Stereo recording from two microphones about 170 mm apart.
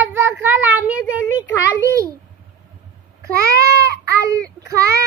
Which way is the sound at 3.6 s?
20° right (ahead or behind).